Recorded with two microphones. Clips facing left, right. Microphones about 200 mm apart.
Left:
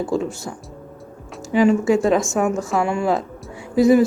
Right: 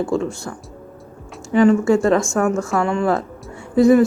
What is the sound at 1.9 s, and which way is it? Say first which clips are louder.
Speech: right 1 dB; centre (ahead or behind).